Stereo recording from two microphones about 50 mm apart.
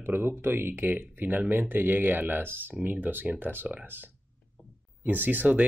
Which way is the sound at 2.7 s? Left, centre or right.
Right.